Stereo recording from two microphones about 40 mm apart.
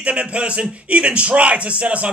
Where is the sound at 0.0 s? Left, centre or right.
Right.